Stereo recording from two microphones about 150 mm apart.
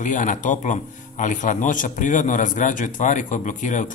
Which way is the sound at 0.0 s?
55° left (ahead or behind).